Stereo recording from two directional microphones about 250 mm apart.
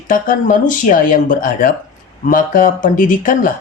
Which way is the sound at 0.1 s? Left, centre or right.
Left.